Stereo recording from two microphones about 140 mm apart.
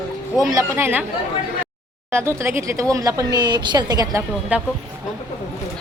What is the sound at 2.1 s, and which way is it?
Speech, 20° right (ahead or behind).